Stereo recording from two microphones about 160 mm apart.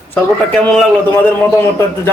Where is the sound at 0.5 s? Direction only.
5° left (ahead or behind).